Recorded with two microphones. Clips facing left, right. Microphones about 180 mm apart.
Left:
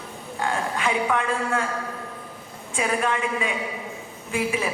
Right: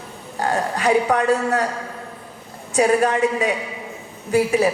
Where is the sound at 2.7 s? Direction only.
40° right (ahead or behind).